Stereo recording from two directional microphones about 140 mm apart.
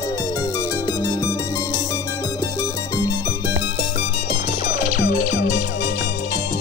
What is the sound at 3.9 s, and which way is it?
Music, 55° left (ahead or behind).